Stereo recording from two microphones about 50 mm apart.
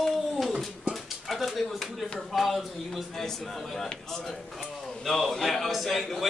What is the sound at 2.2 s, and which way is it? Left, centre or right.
A man's voice, centre.